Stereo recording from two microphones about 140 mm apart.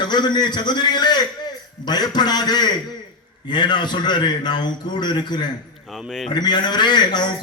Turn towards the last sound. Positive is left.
turn(degrees=30)  # may be behind; listen again after turning